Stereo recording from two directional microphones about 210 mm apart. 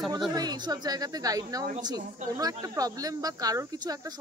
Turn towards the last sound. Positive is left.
turn(degrees=-15)  # may be behind; listen again after turning